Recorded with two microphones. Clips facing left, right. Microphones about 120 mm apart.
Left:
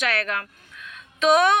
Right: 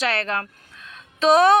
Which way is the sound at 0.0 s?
30° right (ahead or behind).